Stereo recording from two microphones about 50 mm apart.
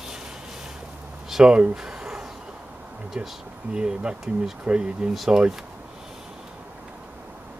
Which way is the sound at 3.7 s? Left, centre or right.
Centre.